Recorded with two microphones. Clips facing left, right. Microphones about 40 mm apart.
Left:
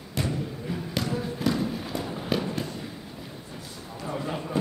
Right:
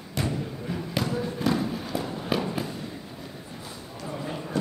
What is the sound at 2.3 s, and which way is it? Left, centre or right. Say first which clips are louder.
Fireworks: right 1 dB; centre.